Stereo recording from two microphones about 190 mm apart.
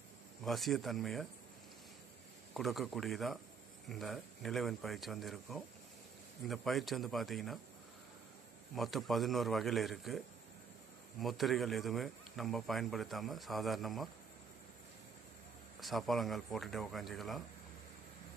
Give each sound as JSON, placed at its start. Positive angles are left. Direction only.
{"t": 0.4, "sound": "speech", "side_deg": 0}
{"t": 2.5, "sound": "speech", "side_deg": 0}
{"t": 8.7, "sound": "speech", "side_deg": 0}
{"t": 15.8, "sound": "speech", "side_deg": 0}